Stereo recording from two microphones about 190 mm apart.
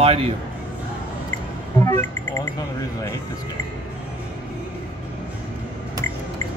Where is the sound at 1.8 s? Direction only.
10° left (ahead or behind).